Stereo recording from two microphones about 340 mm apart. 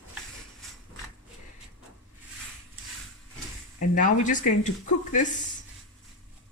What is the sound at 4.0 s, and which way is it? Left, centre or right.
Speech, left.